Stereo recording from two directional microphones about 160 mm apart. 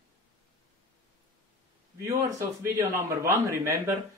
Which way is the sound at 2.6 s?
20° right (ahead or behind).